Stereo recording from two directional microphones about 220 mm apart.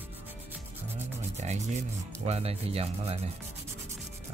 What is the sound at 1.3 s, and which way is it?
Speech, 30° right (ahead or behind).